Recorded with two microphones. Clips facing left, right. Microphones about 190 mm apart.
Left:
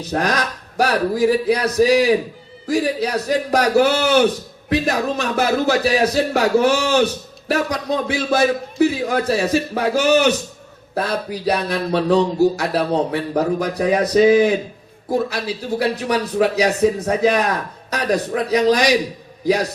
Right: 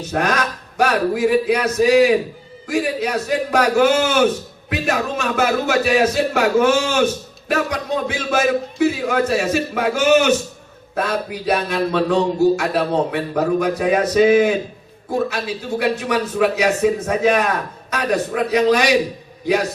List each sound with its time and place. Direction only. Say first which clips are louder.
0.0 s a man's voice: even; 35° left (ahead or behind)